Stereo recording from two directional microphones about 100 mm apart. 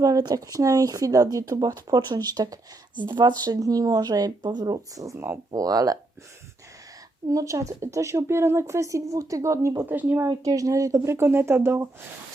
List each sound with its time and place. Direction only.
0.0 s speech: 40° right (ahead or behind); by 5.4 s 25° right (ahead or behind)
5.5 s speech: 35° right (ahead or behind)
7.3 s speech: 35° right (ahead or behind)
9.9 s speech: 20° right (ahead or behind)
10.2 s speech: 35° right (ahead or behind)